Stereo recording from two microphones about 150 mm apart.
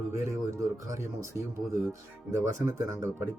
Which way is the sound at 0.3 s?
20° right (ahead or behind).